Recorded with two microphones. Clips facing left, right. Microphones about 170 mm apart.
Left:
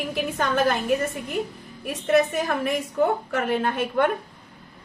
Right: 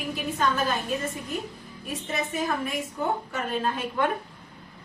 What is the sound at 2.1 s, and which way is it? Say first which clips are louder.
A woman's voice: left 8 dB; 70° left (ahead or behind).